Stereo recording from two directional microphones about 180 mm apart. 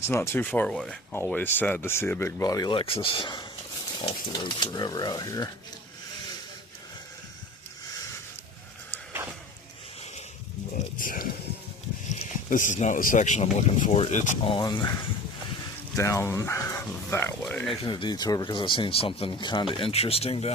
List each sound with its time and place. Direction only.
0.1 s speech: 15° left (ahead or behind)
10.8 s speech: 50° left (ahead or behind)
12.0 s speech: 40° left (ahead or behind)
14.5 s speech: 25° left (ahead or behind)
16.0 s speech: 15° left (ahead or behind)
17.5 s speech: 5° left (ahead or behind)
17.8 s speech: 25° left (ahead or behind)